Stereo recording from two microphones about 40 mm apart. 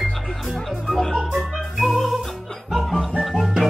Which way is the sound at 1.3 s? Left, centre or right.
Centre.